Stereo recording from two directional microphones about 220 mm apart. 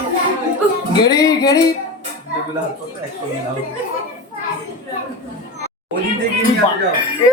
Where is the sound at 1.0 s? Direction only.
15° left (ahead or behind).